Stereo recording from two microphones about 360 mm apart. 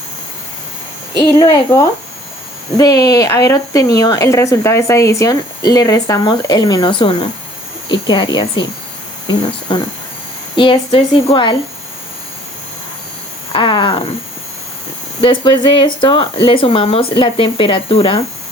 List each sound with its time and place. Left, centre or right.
1.4 s speech: centre
13.5 s speech: centre
15.2 s speech: centre